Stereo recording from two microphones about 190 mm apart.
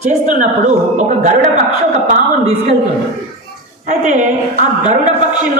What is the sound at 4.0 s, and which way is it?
Speech, 40° right (ahead or behind).